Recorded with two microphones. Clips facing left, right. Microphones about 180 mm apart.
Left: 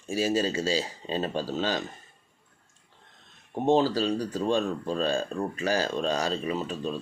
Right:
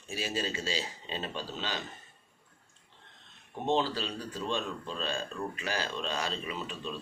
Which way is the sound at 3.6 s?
40° left (ahead or behind).